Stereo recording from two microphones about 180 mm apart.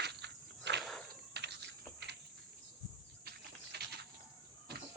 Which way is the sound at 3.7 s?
70° right (ahead or behind).